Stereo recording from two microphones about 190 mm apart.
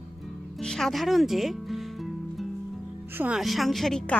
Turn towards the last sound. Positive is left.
turn(degrees=5)  # may be behind; listen again after turning